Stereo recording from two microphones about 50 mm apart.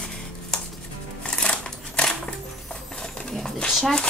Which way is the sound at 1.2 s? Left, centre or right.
Centre.